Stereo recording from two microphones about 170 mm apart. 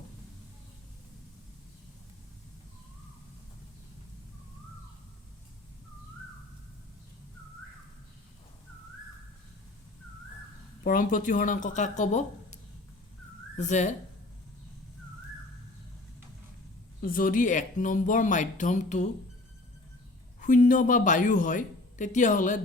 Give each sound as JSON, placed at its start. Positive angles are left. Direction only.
{"t": 10.8, "sound": "speech", "side_deg": 50}
{"t": 13.6, "sound": "speech", "side_deg": 45}
{"t": 17.0, "sound": "speech", "side_deg": 55}
{"t": 20.4, "sound": "speech", "side_deg": 50}